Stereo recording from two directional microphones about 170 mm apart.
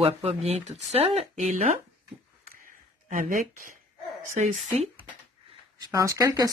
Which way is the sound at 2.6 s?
55° right (ahead or behind).